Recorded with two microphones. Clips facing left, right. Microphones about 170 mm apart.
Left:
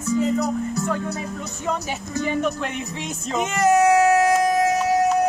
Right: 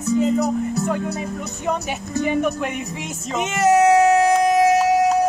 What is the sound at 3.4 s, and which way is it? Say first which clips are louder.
Music: right 2 dB; 20° right (ahead or behind).